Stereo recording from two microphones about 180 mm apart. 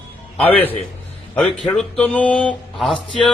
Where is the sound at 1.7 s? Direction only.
5° left (ahead or behind).